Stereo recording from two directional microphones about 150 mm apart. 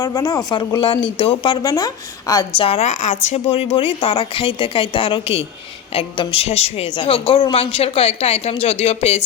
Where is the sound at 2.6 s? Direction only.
40° left (ahead or behind).